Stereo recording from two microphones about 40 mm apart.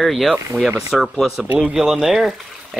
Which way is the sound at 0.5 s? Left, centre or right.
Centre.